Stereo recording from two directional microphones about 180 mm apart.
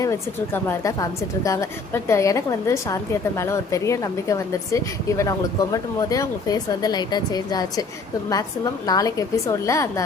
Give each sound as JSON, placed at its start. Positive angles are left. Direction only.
{"t": 0.0, "sound": "a woman's voice", "side_deg": 15}
{"t": 8.9, "sound": "a woman's voice", "side_deg": 20}